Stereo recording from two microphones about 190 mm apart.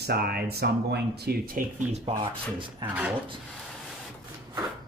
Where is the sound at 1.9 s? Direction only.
30° right (ahead or behind).